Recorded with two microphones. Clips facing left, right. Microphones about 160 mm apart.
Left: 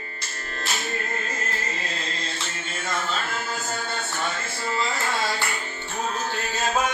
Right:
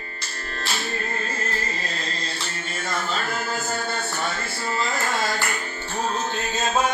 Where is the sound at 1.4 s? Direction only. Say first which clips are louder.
Right 2 dB; 35° right (ahead or behind).